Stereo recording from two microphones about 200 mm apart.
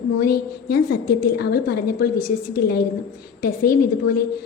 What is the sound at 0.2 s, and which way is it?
A woman's voice, 50° left (ahead or behind).